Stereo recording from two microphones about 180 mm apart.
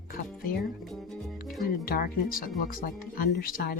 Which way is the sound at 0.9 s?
Centre (ahead or behind).